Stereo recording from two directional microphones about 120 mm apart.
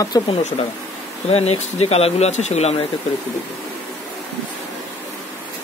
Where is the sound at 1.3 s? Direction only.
60° left (ahead or behind).